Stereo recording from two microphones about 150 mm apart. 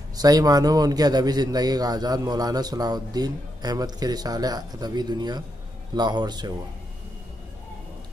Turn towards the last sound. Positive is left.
turn(degrees=-25)  # may be behind; listen again after turning